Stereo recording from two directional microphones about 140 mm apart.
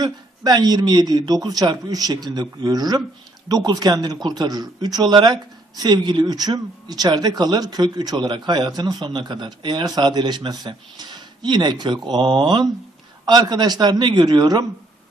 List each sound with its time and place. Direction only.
0.0 s speech: 30° right (ahead or behind)